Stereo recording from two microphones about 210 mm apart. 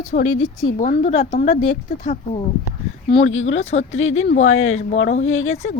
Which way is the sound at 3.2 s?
70° left (ahead or behind).